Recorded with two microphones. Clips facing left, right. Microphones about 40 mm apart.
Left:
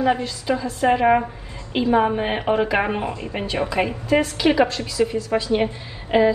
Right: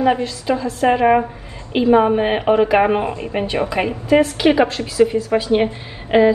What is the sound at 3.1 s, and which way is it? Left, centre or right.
A woman's voice, right.